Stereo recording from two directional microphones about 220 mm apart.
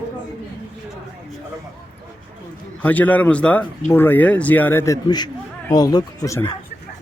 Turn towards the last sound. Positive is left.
turn(degrees=15)  # may be behind; listen again after turning